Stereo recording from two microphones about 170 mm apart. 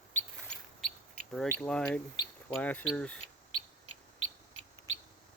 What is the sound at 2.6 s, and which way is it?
Speech, 10° left (ahead or behind).